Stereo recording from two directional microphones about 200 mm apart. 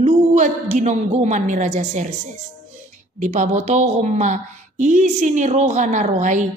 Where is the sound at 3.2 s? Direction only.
35° right (ahead or behind).